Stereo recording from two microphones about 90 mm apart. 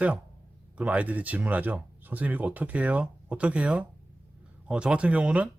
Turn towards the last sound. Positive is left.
turn(degrees=-15)  # may be behind; listen again after turning